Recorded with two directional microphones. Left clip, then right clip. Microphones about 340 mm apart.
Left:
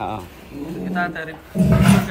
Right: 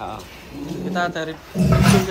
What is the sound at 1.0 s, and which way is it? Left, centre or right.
Speech, centre.